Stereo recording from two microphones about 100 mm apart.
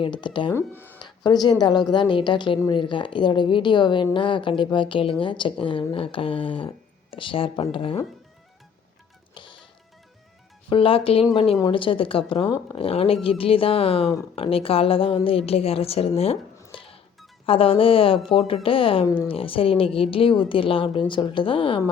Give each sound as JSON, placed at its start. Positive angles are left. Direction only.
{"t": 0.0, "sound": "a woman's voice", "side_deg": 50}
{"t": 0.5, "sound": "speech", "side_deg": 20}
{"t": 0.9, "sound": "a woman's voice", "side_deg": 45}
{"t": 9.3, "sound": "music", "side_deg": 55}
{"t": 10.7, "sound": "a woman's voice", "side_deg": 65}
{"t": 16.7, "sound": "music", "side_deg": 65}
{"t": 17.4, "sound": "a woman's voice", "side_deg": 70}